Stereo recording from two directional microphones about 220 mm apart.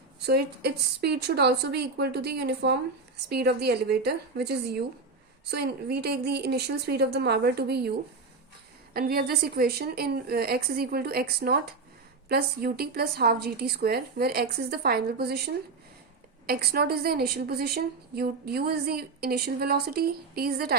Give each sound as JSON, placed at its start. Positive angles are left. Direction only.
{"t": 0.2, "sound": "a woman's voice", "side_deg": -50}